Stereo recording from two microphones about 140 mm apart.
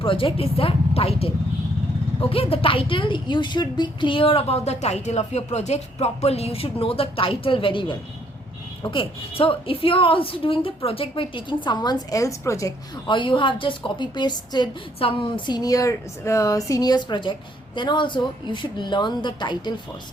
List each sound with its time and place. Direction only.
0.0 s a woman's voice: 40° left (ahead or behind)
2.3 s a woman's voice: 45° left (ahead or behind); by 12.7 s 25° left (ahead or behind)
13.1 s a woman's voice: 35° left (ahead or behind)